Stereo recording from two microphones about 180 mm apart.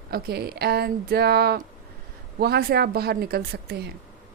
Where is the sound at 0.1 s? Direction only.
60° right (ahead or behind).